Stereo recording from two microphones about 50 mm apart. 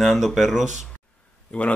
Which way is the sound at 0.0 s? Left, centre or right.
Centre.